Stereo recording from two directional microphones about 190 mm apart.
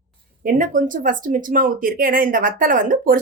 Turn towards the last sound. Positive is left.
turn(degrees=-45)  # may be behind; listen again after turning